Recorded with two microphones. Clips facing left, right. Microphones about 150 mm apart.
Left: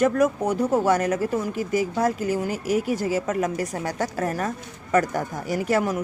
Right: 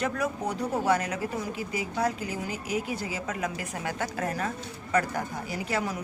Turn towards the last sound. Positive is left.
turn(degrees=45)  # may be behind; listen again after turning